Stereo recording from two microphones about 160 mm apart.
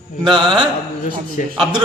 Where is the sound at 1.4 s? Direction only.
60° left (ahead or behind).